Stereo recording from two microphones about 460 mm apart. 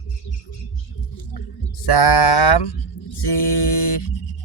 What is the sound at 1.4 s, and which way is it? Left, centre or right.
Speech, left.